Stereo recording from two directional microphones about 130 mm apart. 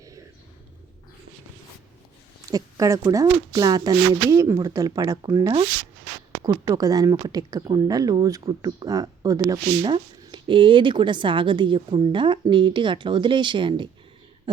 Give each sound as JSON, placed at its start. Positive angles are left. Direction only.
{"t": 2.5, "sound": "speech", "side_deg": -25}